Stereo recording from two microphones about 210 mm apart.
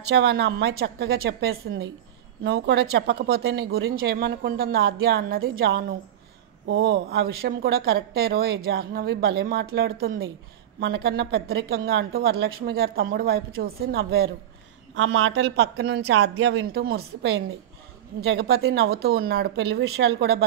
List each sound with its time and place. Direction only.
0.1 s speech: 50° right (ahead or behind)
6.7 s speech: 65° right (ahead or behind)
7.1 s speech: 50° right (ahead or behind)
15.0 s speech: 70° right (ahead or behind)
16.7 s speech: 50° right (ahead or behind)